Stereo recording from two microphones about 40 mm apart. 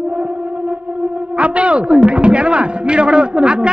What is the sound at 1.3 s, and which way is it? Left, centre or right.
A man's voice, right.